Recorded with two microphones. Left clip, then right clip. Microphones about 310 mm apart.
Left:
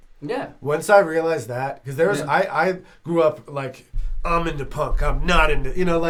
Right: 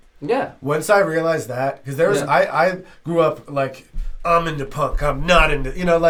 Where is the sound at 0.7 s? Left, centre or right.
Left.